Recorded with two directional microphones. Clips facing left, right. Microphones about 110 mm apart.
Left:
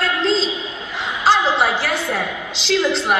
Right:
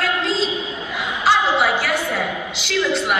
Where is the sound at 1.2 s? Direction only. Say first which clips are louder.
Left 1 dB; 30° left (ahead or behind).